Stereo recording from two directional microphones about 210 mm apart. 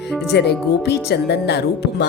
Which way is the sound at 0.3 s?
50° left (ahead or behind).